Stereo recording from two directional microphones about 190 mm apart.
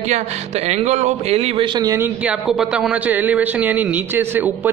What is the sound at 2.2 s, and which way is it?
A man's voice, 5° right (ahead or behind).